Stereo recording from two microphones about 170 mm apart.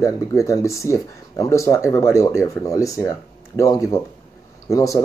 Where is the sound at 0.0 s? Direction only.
20° left (ahead or behind).